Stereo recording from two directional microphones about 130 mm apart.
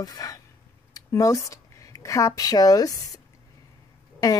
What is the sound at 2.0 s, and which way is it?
A woman's voice, 25° left (ahead or behind).